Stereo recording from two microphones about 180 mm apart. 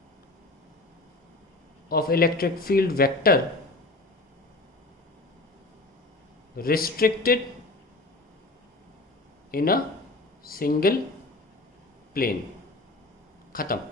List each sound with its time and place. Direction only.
1.9 s speech: 55° left (ahead or behind)
6.6 s speech: 55° left (ahead or behind)
9.5 s speech: 55° left (ahead or behind)
12.1 s speech: 55° left (ahead or behind)
13.5 s speech: 50° left (ahead or behind)